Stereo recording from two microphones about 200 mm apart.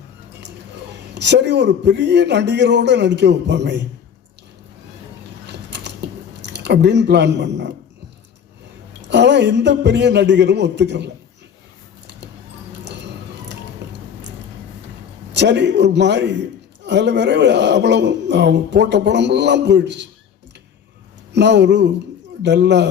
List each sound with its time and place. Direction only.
1.1 s a man's voice: 60° right (ahead or behind)
5.5 s mechanisms: 60° right (ahead or behind)
6.4 s speech: 60° right (ahead or behind)
9.0 s a man's voice: 60° right (ahead or behind)
15.3 s a man's voice: 60° right (ahead or behind)
21.3 s a man's voice: 60° right (ahead or behind)